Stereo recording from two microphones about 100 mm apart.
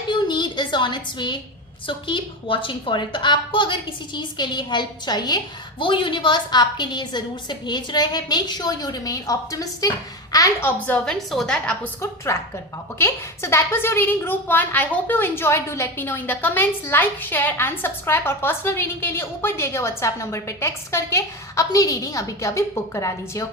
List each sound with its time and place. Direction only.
0.1 s a sound: 50° left (ahead or behind)
1.9 s a woman's voice: 55° left (ahead or behind)
5.8 s a woman's voice: 55° left (ahead or behind); by 9.9 s 35° left (ahead or behind)
10.6 s a woman's voice: 20° left (ahead or behind)
11.0 s a woman's voice: 5° left (ahead or behind)
13.0 s a woman's voice: 25° left (ahead or behind)